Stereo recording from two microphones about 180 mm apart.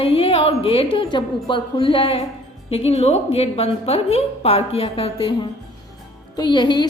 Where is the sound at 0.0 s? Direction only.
30° left (ahead or behind).